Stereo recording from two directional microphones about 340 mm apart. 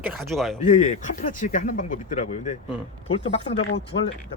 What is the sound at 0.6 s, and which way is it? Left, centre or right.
Speech, left.